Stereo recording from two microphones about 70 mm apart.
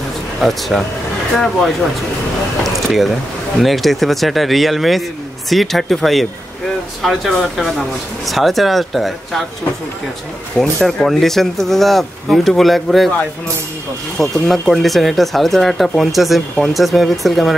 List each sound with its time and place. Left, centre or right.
0.4 s speech: centre
2.6 s a sound: centre
3.5 s speech: centre
10.6 s speech: centre
14.1 s speech: centre